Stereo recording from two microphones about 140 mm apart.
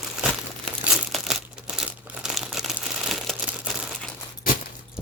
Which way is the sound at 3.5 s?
5° right (ahead or behind).